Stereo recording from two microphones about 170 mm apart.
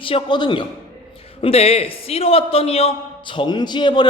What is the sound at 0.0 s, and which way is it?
A man's voice, 30° left (ahead or behind).